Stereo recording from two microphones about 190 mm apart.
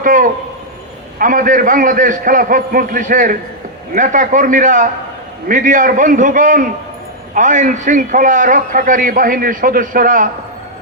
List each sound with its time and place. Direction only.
0.0 s a man's voice: 45° right (ahead or behind)